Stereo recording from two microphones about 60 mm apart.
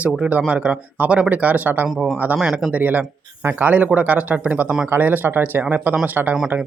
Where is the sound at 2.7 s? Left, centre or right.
Right.